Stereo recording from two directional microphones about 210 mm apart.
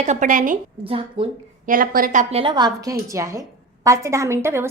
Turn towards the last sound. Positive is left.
turn(degrees=-10)  # may be behind; listen again after turning